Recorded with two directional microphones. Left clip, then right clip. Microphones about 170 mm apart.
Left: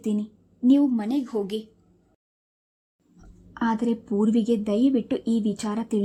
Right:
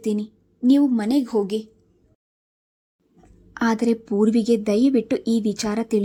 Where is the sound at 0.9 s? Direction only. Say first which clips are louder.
Right 5 dB; 25° right (ahead or behind).